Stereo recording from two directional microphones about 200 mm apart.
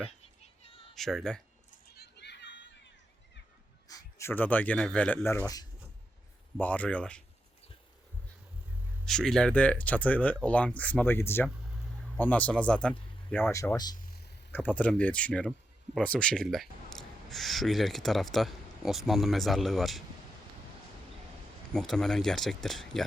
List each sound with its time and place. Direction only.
0.4 s a sound: 30° left (ahead or behind)
0.9 s speech: centre (ahead or behind)
1.9 s a sound: 55° left (ahead or behind)
3.8 s speech: 15° left (ahead or behind)
9.0 s speech: 5° left (ahead or behind)
11.4 s speech: 5° right (ahead or behind)
13.9 s a sound: 45° left (ahead or behind)
14.5 s speech: 10° left (ahead or behind)
21.7 s speech: 5° left (ahead or behind)